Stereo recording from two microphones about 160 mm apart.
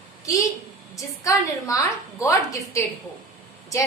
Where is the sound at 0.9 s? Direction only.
20° left (ahead or behind).